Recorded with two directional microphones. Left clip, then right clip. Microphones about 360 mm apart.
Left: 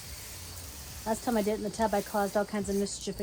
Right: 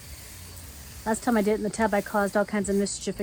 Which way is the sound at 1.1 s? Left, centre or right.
Right.